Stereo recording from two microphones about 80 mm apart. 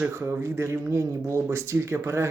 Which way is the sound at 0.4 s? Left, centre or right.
Right.